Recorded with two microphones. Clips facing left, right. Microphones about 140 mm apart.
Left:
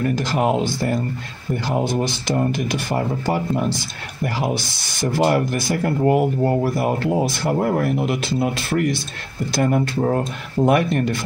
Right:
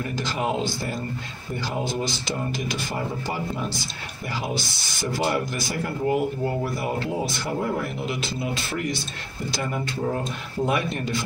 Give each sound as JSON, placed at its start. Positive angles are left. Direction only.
{"t": 0.0, "sound": "speech", "side_deg": 60}
{"t": 5.1, "sound": "speech", "side_deg": 55}